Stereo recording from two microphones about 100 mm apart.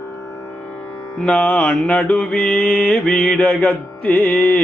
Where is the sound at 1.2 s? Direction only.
10° left (ahead or behind).